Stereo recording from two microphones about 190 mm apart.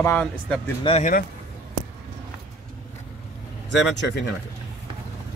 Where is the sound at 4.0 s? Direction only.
65° left (ahead or behind).